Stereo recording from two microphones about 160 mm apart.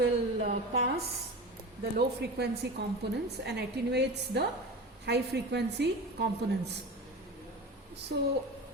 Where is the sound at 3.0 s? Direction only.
90° right.